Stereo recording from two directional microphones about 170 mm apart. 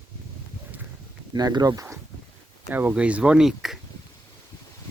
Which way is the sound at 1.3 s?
25° right (ahead or behind).